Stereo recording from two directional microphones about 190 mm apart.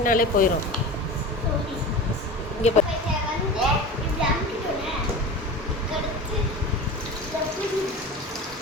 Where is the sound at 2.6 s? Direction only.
35° left (ahead or behind).